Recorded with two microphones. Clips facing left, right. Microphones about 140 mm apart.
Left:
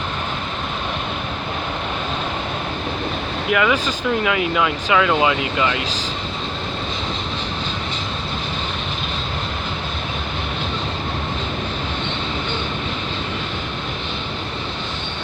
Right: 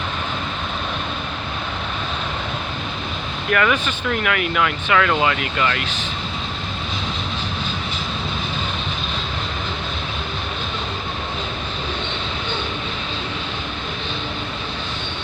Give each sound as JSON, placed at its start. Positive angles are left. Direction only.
{"t": 3.5, "sound": "speech", "side_deg": 15}